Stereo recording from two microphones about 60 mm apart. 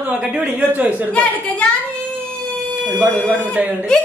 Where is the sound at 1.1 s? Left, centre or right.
Centre.